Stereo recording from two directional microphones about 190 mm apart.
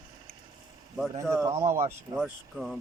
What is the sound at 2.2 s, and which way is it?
Speech, centre (ahead or behind).